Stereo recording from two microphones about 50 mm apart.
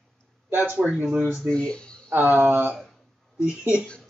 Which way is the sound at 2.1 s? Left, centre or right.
Right.